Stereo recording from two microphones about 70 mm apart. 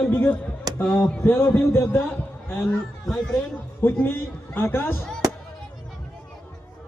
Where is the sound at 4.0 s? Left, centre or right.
Left.